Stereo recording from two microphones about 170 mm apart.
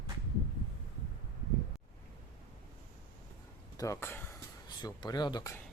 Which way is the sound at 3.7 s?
15° left (ahead or behind).